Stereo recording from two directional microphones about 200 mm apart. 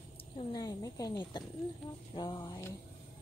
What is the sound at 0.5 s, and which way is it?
Speech, 20° left (ahead or behind).